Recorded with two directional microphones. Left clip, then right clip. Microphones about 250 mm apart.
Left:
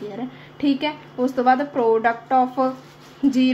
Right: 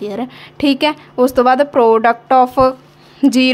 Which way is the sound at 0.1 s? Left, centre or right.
Right.